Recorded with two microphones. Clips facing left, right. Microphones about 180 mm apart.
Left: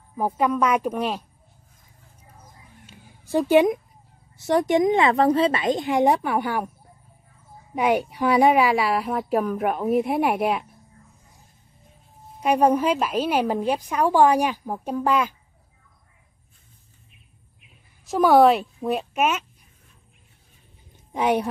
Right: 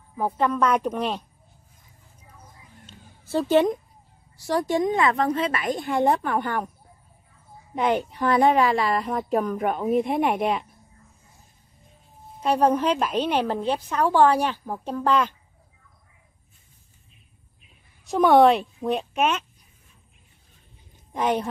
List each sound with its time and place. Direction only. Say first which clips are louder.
0.2 s a woman's voice: left 1 dB; 10° left (ahead or behind)
2.9 s cat: left 2 dB; 15° left (ahead or behind)
4.4 s speech: left 4 dB; 20° left (ahead or behind)
7.7 s a woman's voice: left 2 dB; 10° left (ahead or behind)
12.4 s a woman's voice: left 2 dB; 10° left (ahead or behind)
18.0 s a woman's voice: even; centre (ahead or behind)
21.1 s a woman's voice: left 2 dB; 10° left (ahead or behind)